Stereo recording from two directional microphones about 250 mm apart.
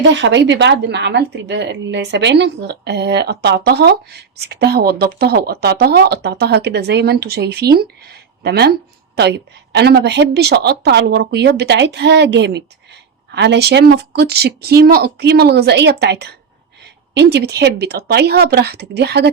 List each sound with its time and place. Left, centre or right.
0.0 s a woman's voice: right